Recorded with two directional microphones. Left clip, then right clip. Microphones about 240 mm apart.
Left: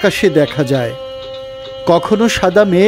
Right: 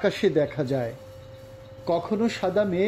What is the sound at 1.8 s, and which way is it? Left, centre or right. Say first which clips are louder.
Speech: left 13 dB; left.